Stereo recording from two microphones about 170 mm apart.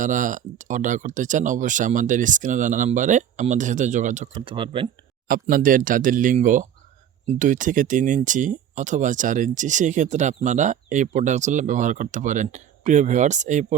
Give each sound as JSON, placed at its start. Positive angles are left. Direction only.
{"t": 0.0, "sound": "speech", "side_deg": -50}
{"t": 4.4, "sound": "speech", "side_deg": -30}
{"t": 5.3, "sound": "speech", "side_deg": -55}